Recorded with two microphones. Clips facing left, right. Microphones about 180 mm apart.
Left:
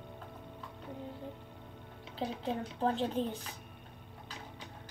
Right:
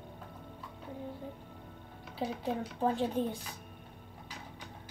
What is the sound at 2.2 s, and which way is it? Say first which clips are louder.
A woman's voice: right 1 dB; 10° right (ahead or behind).